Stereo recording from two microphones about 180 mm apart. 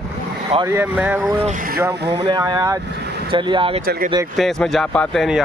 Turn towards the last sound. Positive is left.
turn(degrees=0)  # may be behind; listen again after turning